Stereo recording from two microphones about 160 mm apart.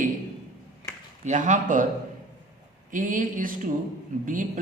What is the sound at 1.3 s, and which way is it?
Speech, 50° right (ahead or behind).